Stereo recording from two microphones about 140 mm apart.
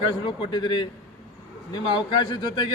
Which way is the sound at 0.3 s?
35° left (ahead or behind).